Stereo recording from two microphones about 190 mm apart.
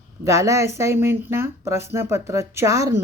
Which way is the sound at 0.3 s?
15° right (ahead or behind).